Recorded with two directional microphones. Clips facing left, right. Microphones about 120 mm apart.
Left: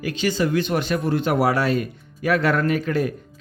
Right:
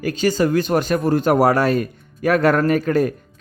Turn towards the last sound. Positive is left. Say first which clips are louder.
# right 4 dB
turn(degrees=-45)  # may be behind; listen again after turning